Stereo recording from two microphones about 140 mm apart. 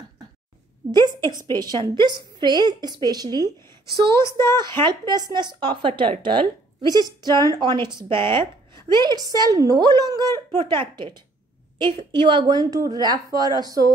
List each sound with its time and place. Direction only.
1.5 s speech: 30° right (ahead or behind)
4.1 s speech: 20° left (ahead or behind)
4.6 s speech: 30° right (ahead or behind)
7.3 s speech: 25° left (ahead or behind)
7.6 s a woman's voice: 30° right (ahead or behind)